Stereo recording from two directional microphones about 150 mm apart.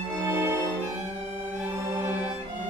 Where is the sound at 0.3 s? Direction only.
15° right (ahead or behind).